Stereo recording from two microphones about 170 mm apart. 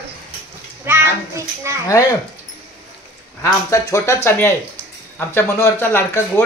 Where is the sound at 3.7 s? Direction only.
15° left (ahead or behind).